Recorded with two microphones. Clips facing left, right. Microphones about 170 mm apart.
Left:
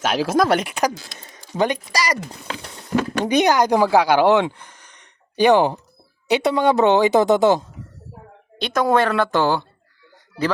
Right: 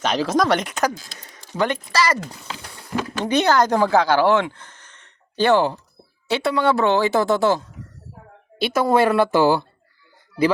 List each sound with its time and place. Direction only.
0.0 s speech: 10° left (ahead or behind)
3.2 s a woman's voice: 15° left (ahead or behind)
8.5 s a woman's voice: 5° right (ahead or behind)